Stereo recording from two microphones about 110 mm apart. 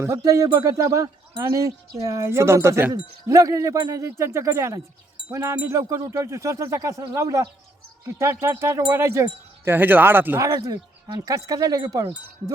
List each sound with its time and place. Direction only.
0.0 s speech: 25° right (ahead or behind)